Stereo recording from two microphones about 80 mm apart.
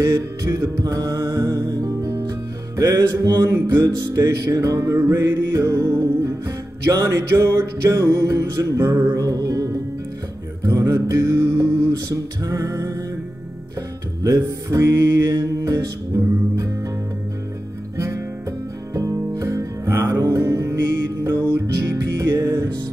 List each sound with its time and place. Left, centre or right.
0.0 s music: right
3.4 s music: right
4.7 s music: right
10.6 s mantra: right
12.4 s music: right
14.2 s music: right
17.9 s music: right